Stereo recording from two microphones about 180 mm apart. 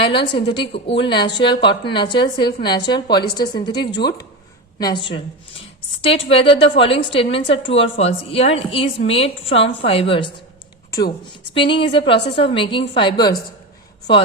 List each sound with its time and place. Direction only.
0.0 s a woman's voice: 30° left (ahead or behind)
4.8 s a woman's voice: 25° left (ahead or behind)
11.5 s a woman's voice: 30° left (ahead or behind)